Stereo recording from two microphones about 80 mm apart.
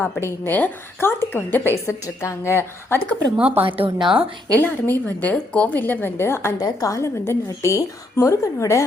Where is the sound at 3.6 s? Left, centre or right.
Right.